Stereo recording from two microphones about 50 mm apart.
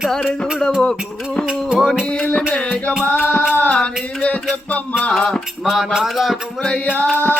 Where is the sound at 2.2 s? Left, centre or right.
Left.